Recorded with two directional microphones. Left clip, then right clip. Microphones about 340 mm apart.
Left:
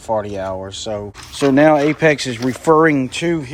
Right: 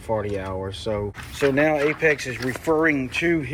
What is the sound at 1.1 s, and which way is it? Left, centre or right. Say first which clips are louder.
Speech: left 8 dB; centre.